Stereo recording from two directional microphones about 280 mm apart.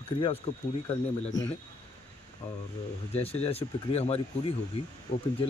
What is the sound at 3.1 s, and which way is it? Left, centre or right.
Speech, left.